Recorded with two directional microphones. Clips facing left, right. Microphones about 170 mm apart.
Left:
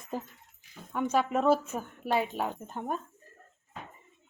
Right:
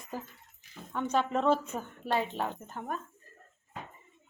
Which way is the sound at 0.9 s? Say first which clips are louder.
Left 2 dB; 10° left (ahead or behind).